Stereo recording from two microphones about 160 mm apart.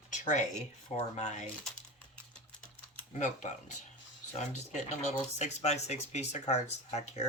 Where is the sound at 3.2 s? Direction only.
45° left (ahead or behind).